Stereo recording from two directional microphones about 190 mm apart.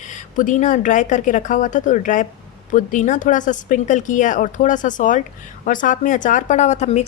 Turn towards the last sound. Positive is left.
turn(degrees=35)  # may be behind; listen again after turning